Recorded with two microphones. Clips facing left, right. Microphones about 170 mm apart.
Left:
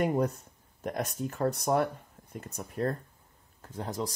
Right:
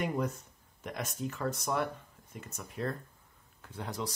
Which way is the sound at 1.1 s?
55° left (ahead or behind).